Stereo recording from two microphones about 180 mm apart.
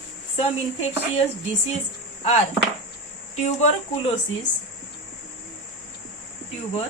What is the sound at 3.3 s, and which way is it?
Speech, 40° left (ahead or behind).